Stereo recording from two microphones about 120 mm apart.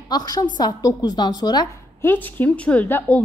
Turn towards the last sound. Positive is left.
turn(degrees=15)  # may be behind; listen again after turning